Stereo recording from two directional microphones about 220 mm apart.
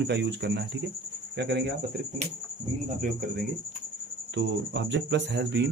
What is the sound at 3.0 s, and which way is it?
Speech, 40° right (ahead or behind).